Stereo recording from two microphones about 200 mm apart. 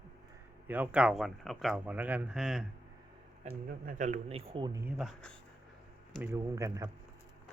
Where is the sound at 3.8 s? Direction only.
35° right (ahead or behind).